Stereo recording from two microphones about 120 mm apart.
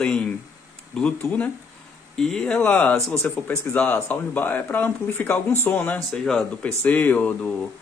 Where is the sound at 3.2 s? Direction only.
20° left (ahead or behind).